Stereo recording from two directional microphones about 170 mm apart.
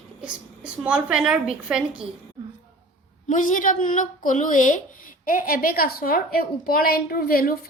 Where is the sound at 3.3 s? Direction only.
50° left (ahead or behind).